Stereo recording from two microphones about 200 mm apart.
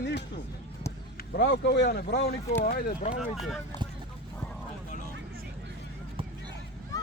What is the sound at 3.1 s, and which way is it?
Speech, centre (ahead or behind).